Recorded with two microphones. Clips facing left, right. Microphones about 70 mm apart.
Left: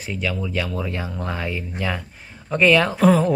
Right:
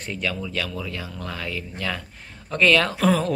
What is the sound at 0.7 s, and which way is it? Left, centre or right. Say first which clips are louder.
Speech: left 5 dB; left.